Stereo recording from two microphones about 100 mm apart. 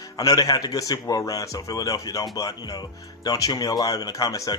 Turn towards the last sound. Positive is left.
turn(degrees=35)  # may be behind; listen again after turning